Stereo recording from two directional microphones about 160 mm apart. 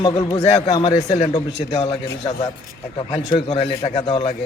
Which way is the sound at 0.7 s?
25° left (ahead or behind).